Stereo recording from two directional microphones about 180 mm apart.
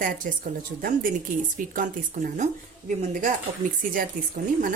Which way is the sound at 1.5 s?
45° right (ahead or behind).